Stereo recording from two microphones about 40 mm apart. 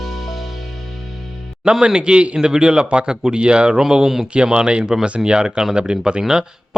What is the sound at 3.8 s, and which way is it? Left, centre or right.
Speech, centre.